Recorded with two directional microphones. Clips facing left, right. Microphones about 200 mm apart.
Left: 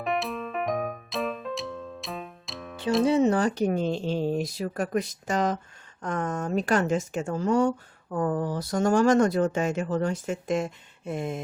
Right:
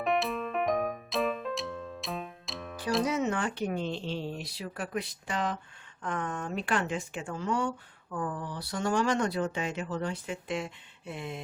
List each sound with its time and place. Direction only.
0.0 s music: centre (ahead or behind)
3.0 s speech: 30° left (ahead or behind)